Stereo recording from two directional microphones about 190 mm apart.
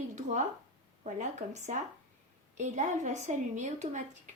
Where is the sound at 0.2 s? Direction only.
40° right (ahead or behind).